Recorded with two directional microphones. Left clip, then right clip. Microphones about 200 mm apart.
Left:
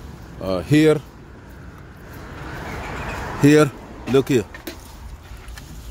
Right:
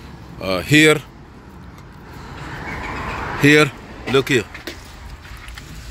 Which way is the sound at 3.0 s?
35° right (ahead or behind).